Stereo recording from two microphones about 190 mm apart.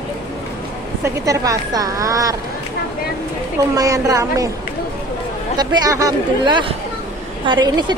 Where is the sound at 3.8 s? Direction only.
15° right (ahead or behind).